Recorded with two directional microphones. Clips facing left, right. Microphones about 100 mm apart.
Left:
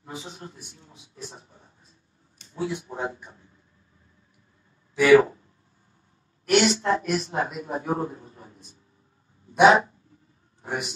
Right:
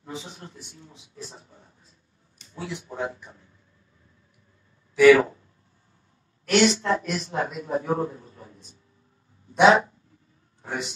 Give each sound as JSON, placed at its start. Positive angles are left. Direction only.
{"t": 0.2, "sound": "a man's voice", "side_deg": 30}
{"t": 2.4, "sound": "a man's voice", "side_deg": 25}
{"t": 4.9, "sound": "speech", "side_deg": 25}
{"t": 6.5, "sound": "a man's voice", "side_deg": 30}